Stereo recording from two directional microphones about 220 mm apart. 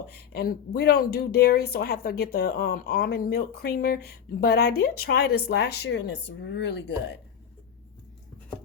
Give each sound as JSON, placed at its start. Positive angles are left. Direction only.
{"t": 0.3, "sound": "speech", "side_deg": 45}